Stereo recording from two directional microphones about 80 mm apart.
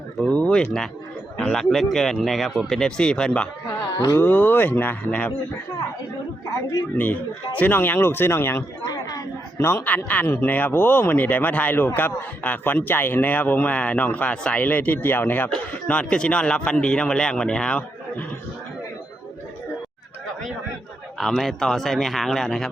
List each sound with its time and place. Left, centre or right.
0.2 s speech: centre
4.1 s a man's voice: left
6.9 s a man's voice: left
8.8 s chatter: left
9.6 s a man's voice: left
15.5 s speech: centre
21.2 s speech: centre